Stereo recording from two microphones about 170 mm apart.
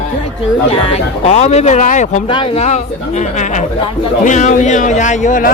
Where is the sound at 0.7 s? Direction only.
35° left (ahead or behind).